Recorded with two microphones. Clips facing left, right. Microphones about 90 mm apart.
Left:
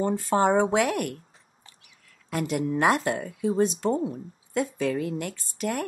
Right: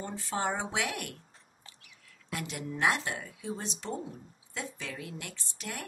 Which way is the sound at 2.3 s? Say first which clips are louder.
Left 11 dB; 50° left (ahead or behind).